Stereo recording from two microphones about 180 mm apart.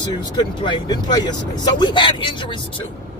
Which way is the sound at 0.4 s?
25° left (ahead or behind).